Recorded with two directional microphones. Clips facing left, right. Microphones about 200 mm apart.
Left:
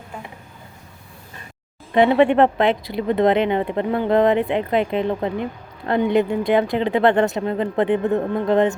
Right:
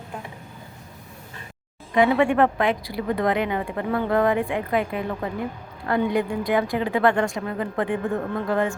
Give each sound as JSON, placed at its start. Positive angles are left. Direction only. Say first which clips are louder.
{"t": 1.9, "sound": "speech", "louder": "left 4 dB", "side_deg": 25}